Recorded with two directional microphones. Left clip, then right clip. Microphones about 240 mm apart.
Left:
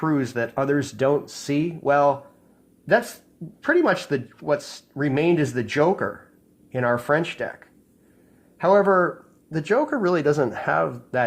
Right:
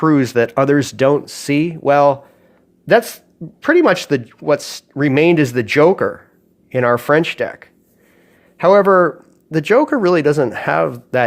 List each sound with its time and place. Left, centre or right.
0.0 s speech: right